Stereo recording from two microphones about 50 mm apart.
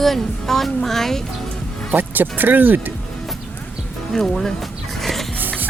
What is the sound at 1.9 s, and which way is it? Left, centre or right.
Speech, right.